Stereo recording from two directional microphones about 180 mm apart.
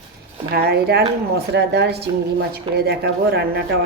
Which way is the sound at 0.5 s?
65° right (ahead or behind).